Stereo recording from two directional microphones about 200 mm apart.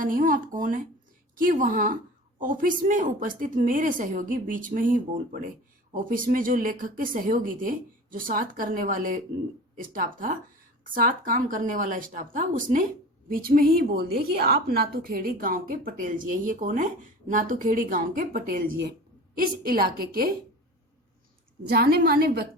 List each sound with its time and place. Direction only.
0.0 s a woman's voice: 40° right (ahead or behind)
21.7 s a woman's voice: 50° right (ahead or behind)